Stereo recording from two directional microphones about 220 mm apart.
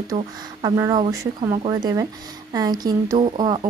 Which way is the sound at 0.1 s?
15° right (ahead or behind).